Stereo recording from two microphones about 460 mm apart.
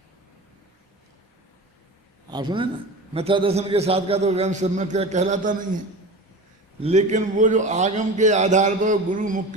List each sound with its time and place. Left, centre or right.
2.3 s a man's voice: centre
6.8 s a man's voice: centre